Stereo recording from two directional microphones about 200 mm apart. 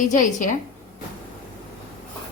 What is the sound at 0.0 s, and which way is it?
Speech, 40° left (ahead or behind).